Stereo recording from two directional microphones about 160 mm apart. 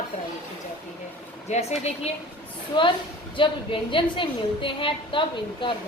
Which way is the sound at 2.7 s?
30° left (ahead or behind).